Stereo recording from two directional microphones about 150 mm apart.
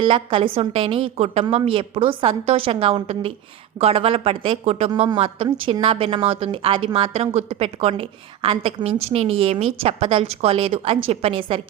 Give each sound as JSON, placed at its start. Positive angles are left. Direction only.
{"t": 0.0, "sound": "speech", "side_deg": -35}